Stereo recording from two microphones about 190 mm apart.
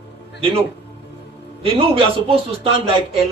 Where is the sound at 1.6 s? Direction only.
30° right (ahead or behind).